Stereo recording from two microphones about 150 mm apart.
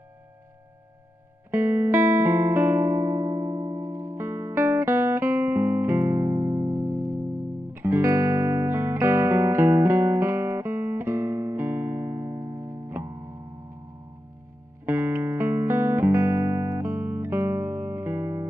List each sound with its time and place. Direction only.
1.5 s music: 20° right (ahead or behind)
14.9 s music: 15° right (ahead or behind)